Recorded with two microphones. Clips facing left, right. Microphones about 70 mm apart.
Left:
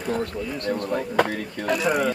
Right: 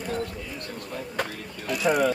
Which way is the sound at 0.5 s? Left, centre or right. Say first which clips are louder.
Left 10 dB; left.